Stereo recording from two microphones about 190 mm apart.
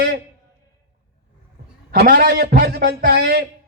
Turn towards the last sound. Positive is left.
turn(degrees=-55)  # may be behind; listen again after turning